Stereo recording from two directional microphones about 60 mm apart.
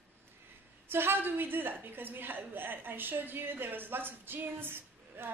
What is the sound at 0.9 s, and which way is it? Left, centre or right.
A woman's voice, right.